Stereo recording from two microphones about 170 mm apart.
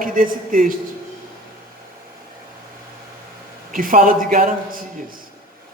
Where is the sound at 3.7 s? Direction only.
55° right (ahead or behind).